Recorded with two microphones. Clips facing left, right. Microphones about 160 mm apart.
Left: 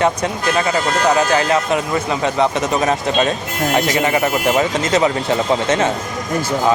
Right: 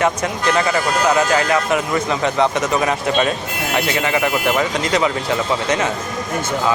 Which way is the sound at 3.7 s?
40° left (ahead or behind).